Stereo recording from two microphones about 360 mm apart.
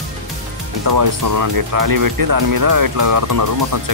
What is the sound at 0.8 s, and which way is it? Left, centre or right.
Speech, right.